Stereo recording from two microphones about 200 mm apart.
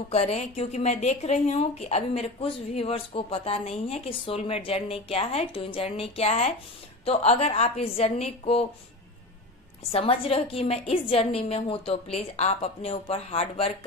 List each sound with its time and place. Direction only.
0.1 s speech: 30° left (ahead or behind)
9.8 s a woman's voice: 30° left (ahead or behind)